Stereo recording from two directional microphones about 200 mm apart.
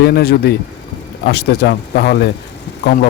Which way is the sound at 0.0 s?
50° left (ahead or behind).